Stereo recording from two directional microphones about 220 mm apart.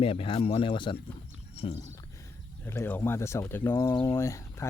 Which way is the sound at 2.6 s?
10° left (ahead or behind).